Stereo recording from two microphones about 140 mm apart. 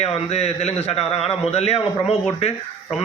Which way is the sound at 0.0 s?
50° left (ahead or behind).